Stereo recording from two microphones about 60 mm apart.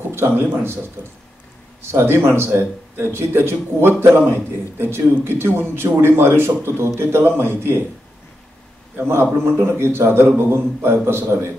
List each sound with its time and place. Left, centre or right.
0.1 s a man's voice: right
1.9 s a man's voice: right
9.0 s speech: right